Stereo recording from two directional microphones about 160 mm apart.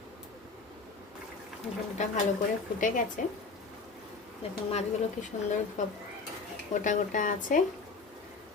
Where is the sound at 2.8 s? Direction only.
55° left (ahead or behind).